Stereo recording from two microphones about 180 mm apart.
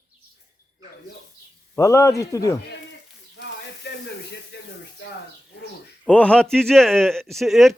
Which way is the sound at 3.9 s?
70° left (ahead or behind).